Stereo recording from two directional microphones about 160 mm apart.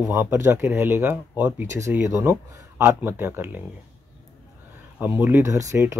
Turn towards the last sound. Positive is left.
turn(degrees=-20)  # may be behind; listen again after turning